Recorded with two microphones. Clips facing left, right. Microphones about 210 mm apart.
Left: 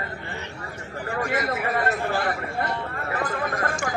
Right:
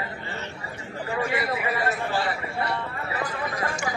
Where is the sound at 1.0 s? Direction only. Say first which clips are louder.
Left 1 dB; 45° left (ahead or behind).